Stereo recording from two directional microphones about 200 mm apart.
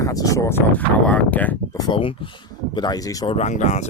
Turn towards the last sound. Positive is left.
turn(degrees=35)  # may be behind; listen again after turning